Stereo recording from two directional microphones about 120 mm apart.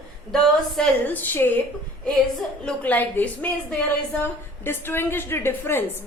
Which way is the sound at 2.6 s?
15° left (ahead or behind).